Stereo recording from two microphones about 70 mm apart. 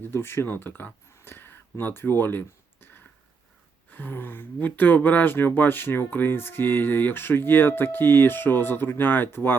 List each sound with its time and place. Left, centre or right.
0.0 s speech: left
1.2 s a sound: left
1.8 s speech: left
3.9 s speech: left